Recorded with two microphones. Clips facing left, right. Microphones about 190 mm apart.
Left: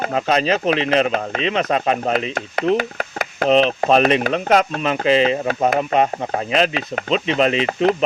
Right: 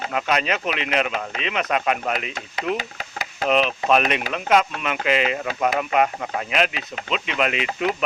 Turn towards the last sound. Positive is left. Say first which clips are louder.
# left 6 dB
turn(degrees=30)  # may be behind; listen again after turning